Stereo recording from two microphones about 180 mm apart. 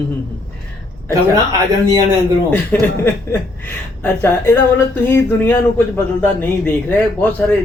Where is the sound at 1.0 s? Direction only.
20° right (ahead or behind).